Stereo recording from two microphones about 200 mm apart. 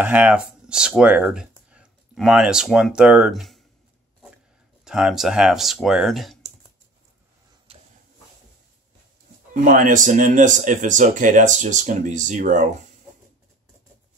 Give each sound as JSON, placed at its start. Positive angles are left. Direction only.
{"t": 0.0, "sound": "speech", "side_deg": -5}
{"t": 4.8, "sound": "speech", "side_deg": -5}
{"t": 7.7, "sound": "a sound", "side_deg": -30}
{"t": 9.5, "sound": "speech", "side_deg": -40}